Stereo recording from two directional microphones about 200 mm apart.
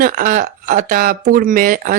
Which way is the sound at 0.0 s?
45° right (ahead or behind).